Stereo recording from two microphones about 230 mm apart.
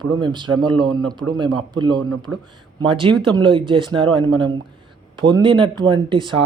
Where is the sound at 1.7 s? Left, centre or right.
Centre.